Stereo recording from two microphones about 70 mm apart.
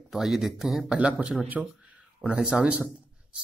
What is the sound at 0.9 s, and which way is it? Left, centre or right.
Speech, centre.